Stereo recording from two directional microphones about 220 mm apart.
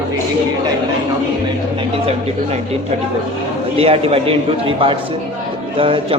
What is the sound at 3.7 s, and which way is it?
Speech, 25° right (ahead or behind).